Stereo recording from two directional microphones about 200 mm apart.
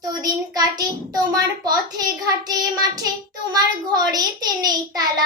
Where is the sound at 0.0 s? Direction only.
20° right (ahead or behind).